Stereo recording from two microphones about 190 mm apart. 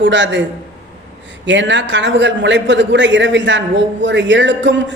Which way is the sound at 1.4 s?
70° right (ahead or behind).